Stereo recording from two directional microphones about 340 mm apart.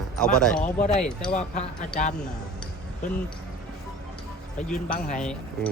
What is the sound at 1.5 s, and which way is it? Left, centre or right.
Speech, left.